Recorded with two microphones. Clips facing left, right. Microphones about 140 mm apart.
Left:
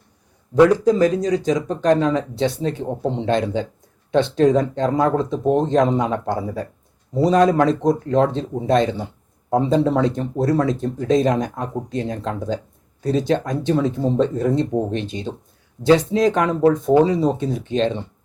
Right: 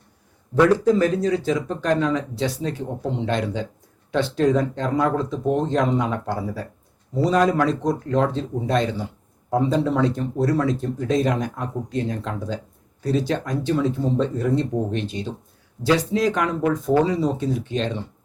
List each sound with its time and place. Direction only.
0.5 s speech: 15° left (ahead or behind)